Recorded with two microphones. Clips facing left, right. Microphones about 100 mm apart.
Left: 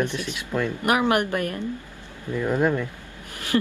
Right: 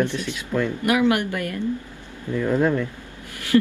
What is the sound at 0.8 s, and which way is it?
Speech, 35° left (ahead or behind).